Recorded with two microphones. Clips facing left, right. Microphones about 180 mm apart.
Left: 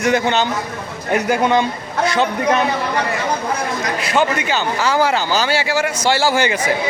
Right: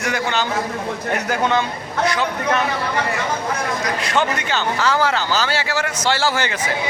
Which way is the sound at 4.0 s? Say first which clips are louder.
Left 5 dB; 10° left (ahead or behind).